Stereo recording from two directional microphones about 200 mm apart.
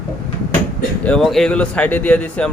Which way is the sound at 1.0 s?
5° left (ahead or behind).